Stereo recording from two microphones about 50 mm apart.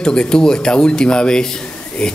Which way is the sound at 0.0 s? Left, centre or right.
Centre.